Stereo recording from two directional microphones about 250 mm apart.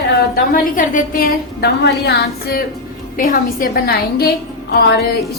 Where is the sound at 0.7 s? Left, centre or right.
Left.